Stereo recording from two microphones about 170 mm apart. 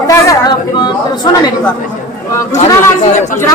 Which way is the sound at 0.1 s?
20° left (ahead or behind).